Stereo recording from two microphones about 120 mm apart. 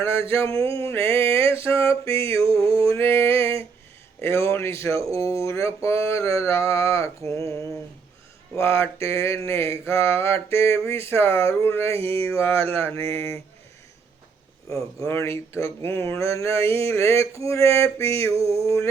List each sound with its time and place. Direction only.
0.0 s mantra: 20° left (ahead or behind)
0.4 s a sound: 50° right (ahead or behind)
0.9 s mantra: 20° left (ahead or behind)
2.4 s a sound: 50° right (ahead or behind)
2.9 s a sound: 20° left (ahead or behind)
4.2 s mantra: 20° left (ahead or behind)
8.5 s mantra: 20° left (ahead or behind)
12.2 s a sound: 20° left (ahead or behind)
12.7 s mantra: 20° left (ahead or behind)
14.9 s mantra: 20° left (ahead or behind)
18.3 s mantra: 55° right (ahead or behind)
18.6 s mantra: 25° left (ahead or behind)